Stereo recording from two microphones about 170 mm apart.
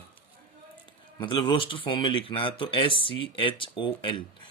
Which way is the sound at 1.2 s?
25° left (ahead or behind).